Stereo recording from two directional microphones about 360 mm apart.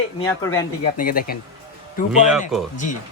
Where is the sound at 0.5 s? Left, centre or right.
Left.